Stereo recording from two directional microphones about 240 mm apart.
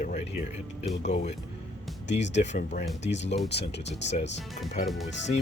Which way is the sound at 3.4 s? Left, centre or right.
Left.